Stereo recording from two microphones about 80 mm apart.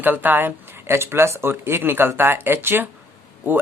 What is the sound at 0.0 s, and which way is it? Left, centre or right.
Speech, right.